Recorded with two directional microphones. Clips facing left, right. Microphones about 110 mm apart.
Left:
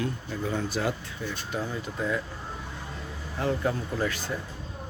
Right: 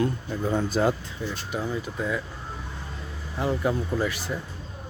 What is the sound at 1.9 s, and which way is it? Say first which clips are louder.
Speech: left 2 dB; centre (ahead or behind).